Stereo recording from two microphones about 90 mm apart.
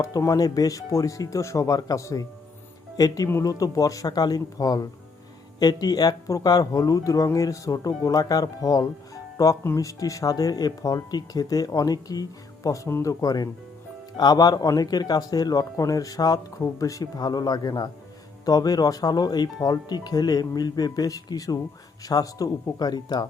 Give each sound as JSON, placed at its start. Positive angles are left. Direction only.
{"t": 0.2, "sound": "speech", "side_deg": 40}
{"t": 3.4, "sound": "speech", "side_deg": 45}